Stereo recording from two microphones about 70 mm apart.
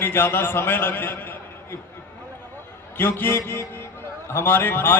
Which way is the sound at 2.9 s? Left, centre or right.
Left.